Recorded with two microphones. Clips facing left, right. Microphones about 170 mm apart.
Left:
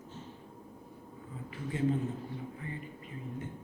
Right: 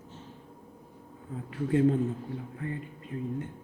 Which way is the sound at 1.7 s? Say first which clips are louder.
Right 7 dB; 65° right (ahead or behind).